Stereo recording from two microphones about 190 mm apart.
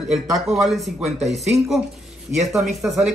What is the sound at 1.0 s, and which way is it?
Speech, 35° right (ahead or behind).